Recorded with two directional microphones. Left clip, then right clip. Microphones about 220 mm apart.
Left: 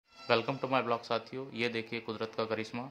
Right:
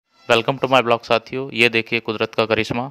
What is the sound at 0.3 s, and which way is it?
Speech, 40° right (ahead or behind).